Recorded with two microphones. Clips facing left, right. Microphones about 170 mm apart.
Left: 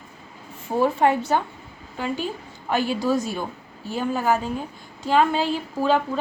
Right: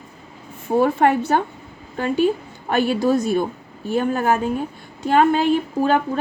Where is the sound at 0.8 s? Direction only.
60° right (ahead or behind).